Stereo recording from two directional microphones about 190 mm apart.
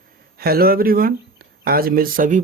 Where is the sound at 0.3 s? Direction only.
55° right (ahead or behind).